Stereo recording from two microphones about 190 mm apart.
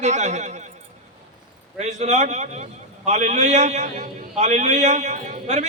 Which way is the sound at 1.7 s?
35° right (ahead or behind).